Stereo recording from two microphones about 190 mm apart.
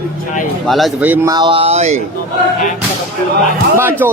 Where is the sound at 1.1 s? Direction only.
20° right (ahead or behind); by 2.0 s 35° right (ahead or behind).